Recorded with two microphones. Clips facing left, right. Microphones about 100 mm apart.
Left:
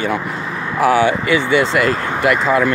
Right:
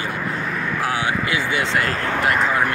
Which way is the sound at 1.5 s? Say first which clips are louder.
Left 8 dB; 90° left.